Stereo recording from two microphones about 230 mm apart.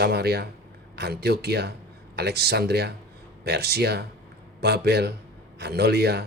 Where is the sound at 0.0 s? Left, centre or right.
Right.